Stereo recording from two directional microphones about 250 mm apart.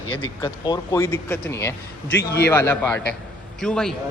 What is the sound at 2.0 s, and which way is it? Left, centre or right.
Speech, left.